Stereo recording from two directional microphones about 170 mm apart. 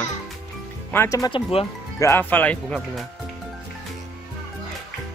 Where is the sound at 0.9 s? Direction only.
20° left (ahead or behind).